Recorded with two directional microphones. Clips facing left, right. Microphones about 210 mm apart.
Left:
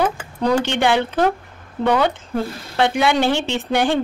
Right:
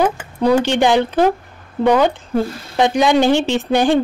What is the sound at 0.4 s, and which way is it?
Speech, 10° right (ahead or behind).